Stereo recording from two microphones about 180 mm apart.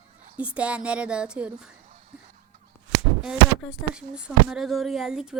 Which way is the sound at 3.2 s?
5° right (ahead or behind).